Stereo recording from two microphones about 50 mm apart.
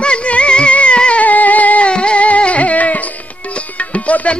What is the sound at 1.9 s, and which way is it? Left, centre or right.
Music, left.